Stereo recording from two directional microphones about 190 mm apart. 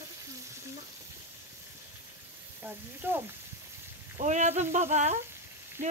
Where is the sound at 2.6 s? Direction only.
10° right (ahead or behind).